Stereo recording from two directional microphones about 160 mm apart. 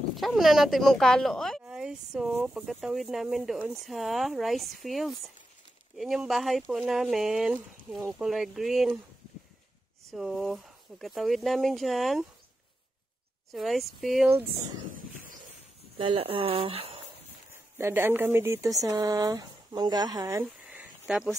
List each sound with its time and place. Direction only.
0.1 s speech: centre (ahead or behind)
10.1 s speech: centre (ahead or behind)
13.5 s speech: centre (ahead or behind)
16.0 s speech: 35° right (ahead or behind)
17.5 s speech: 15° right (ahead or behind)